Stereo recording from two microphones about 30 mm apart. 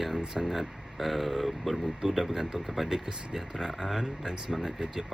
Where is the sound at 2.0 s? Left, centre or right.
Centre.